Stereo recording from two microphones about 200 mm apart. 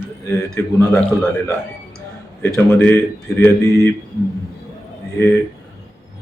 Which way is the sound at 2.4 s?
10° left (ahead or behind).